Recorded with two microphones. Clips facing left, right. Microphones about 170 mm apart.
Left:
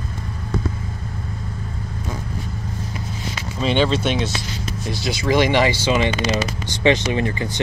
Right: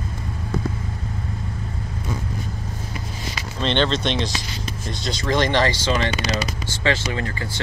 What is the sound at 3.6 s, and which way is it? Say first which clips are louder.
Speech: left 2 dB; 5° left (ahead or behind).